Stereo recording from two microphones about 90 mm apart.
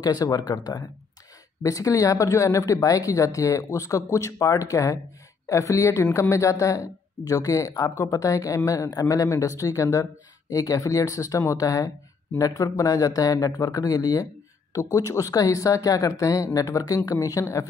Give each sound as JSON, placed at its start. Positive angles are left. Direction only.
{"t": 0.0, "sound": "speech", "side_deg": 45}